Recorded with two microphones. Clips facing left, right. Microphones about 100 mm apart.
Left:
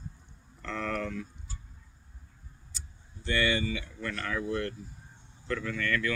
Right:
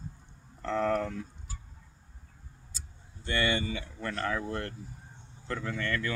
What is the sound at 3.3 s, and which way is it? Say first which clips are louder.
Speech: left 1 dB; 30° right (ahead or behind).